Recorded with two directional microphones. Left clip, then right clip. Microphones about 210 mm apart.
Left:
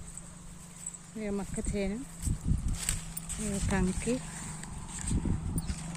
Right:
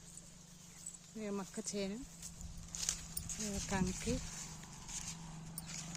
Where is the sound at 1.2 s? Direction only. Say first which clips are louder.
Left 7 dB; 20° right (ahead or behind).